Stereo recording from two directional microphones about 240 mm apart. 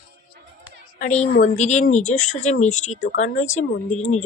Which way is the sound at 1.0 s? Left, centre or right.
Left.